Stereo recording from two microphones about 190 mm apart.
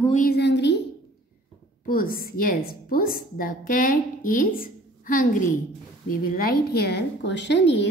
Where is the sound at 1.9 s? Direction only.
50° left (ahead or behind).